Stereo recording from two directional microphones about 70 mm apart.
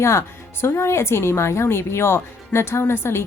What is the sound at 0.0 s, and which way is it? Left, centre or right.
A woman's voice, left.